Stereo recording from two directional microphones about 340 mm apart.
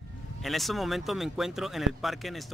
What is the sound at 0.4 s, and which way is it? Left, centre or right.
Speech, centre.